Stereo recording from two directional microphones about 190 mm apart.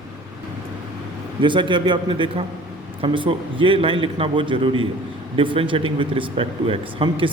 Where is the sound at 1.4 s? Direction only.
25° right (ahead or behind).